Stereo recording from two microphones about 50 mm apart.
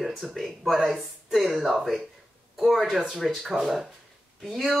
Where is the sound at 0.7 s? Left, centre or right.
Centre.